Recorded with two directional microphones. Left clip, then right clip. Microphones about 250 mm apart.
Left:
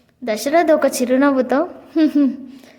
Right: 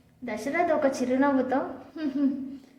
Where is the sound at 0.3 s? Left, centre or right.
Left.